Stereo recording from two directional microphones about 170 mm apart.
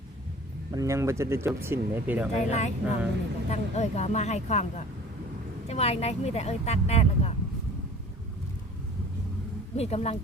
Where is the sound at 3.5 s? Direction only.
40° left (ahead or behind).